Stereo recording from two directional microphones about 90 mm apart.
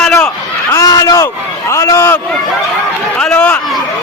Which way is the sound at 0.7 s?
40° left (ahead or behind).